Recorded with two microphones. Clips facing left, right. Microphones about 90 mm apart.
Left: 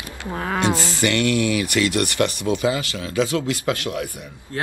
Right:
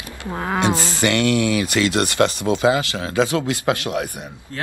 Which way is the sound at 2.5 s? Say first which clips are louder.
Right 4 dB; 25° right (ahead or behind).